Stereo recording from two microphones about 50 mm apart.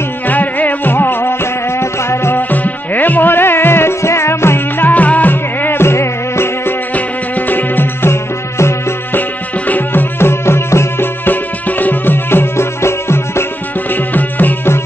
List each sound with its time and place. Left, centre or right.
0.3 s music: left
2.5 s music: left
4.8 s music: left
6.9 s music: left
9.7 s music: left
11.2 s music: left
13.9 s music: left